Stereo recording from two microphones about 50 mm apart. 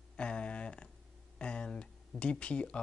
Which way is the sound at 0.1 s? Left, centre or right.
Left.